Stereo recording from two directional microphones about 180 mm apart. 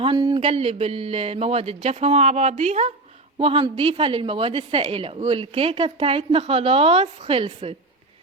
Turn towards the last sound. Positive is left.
turn(degrees=-30)  # may be behind; listen again after turning